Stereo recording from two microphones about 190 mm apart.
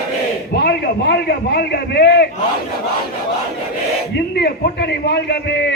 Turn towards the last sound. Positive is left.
turn(degrees=60)  # may be behind; listen again after turning